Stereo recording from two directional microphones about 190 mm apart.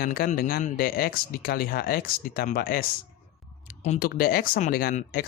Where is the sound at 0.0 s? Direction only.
50° left (ahead or behind).